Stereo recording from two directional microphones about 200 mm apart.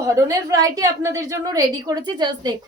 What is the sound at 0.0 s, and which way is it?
A woman's voice, 15° right (ahead or behind).